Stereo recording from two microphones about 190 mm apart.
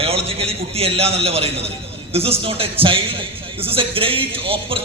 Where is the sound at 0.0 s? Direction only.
30° right (ahead or behind).